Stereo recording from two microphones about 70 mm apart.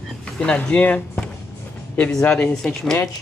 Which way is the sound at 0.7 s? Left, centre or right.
Left.